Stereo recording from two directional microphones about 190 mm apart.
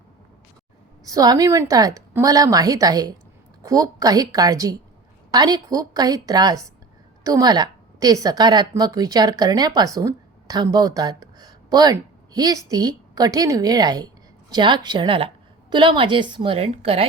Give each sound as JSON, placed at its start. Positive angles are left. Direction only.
{"t": 1.0, "sound": "a woman's voice", "side_deg": -20}